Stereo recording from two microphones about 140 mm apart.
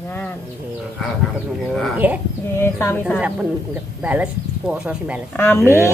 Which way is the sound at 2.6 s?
20° left (ahead or behind).